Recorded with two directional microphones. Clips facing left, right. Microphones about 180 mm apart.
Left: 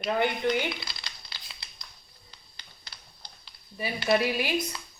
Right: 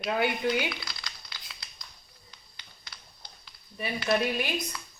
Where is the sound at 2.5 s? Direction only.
35° left (ahead or behind).